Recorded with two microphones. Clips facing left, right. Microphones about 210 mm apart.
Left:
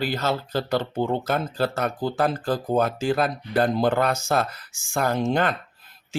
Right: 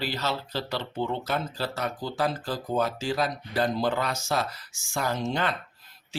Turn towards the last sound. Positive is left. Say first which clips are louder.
# left 6 dB
turn(degrees=50)  # may be behind; listen again after turning